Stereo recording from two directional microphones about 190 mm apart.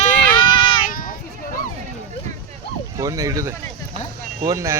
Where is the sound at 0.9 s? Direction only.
45° left (ahead or behind).